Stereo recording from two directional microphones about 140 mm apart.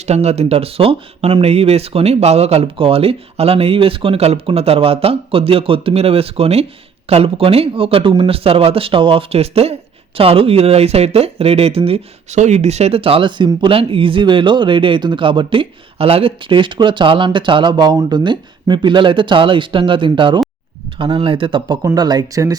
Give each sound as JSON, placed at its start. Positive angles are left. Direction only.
{"t": 0.0, "sound": "speech", "side_deg": -50}